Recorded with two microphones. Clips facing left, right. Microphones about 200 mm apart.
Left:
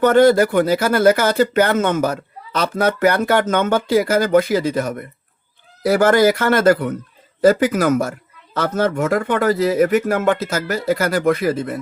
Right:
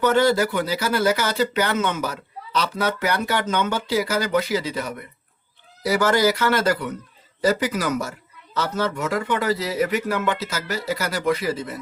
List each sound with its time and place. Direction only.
0.0 s speech: 55° left (ahead or behind)